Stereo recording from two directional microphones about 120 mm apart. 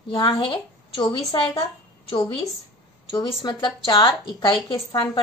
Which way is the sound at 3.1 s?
35° left (ahead or behind).